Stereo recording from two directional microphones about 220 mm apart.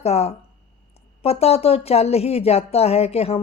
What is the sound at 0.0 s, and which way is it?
Speech, 30° left (ahead or behind).